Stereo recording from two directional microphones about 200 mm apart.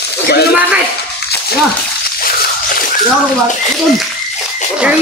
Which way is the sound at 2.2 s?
45° left (ahead or behind).